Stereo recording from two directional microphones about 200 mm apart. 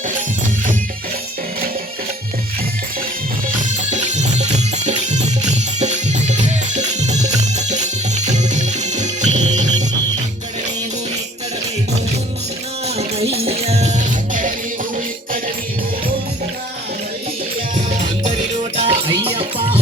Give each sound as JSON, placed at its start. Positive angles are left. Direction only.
{"t": 3.9, "sound": "music", "side_deg": -35}
{"t": 13.0, "sound": "music", "side_deg": -30}
{"t": 17.7, "sound": "music", "side_deg": -35}